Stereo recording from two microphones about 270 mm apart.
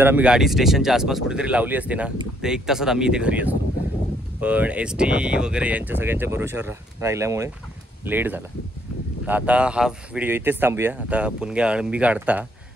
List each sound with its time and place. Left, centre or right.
0.0 s speech: centre